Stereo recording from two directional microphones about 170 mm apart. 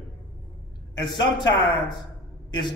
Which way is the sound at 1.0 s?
25° left (ahead or behind).